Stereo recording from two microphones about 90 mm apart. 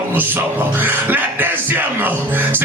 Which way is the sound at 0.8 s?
20° right (ahead or behind).